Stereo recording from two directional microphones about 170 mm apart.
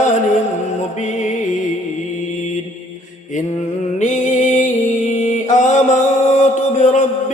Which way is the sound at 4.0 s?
50° left (ahead or behind).